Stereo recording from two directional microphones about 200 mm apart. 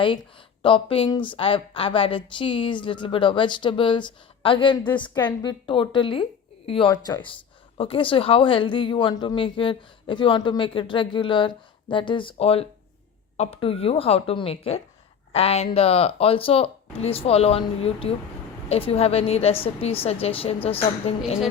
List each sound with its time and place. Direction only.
0.6 s speech: 25° left (ahead or behind)